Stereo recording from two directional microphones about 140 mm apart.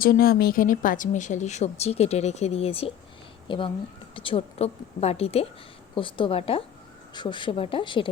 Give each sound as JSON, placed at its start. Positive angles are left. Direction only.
{"t": 0.0, "sound": "a woman's voice", "side_deg": 90}